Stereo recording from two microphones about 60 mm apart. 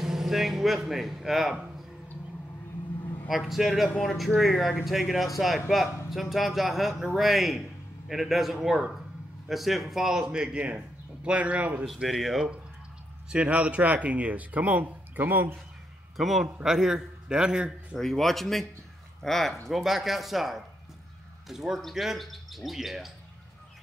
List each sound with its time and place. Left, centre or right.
0.0 s speech: centre
3.3 s a man's voice: centre; by 11.8 s right
12.0 s a man's voice: centre
13.3 s speech: right
16.2 s a man's voice: centre
17.9 s a man's voice: centre